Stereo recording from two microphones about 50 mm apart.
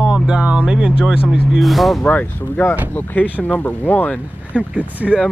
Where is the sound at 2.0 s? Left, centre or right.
Left.